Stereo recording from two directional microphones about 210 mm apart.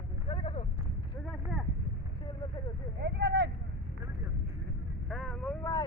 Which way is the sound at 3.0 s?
55° right (ahead or behind).